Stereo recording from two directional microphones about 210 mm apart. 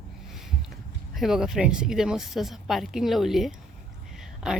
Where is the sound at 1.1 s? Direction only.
Centre (ahead or behind).